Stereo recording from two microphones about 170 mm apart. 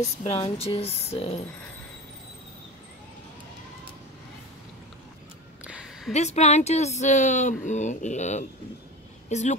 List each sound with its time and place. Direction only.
0.2 s speech: 35° left (ahead or behind)
5.7 s a sound: 5° right (ahead or behind)
6.1 s speech: 40° left (ahead or behind)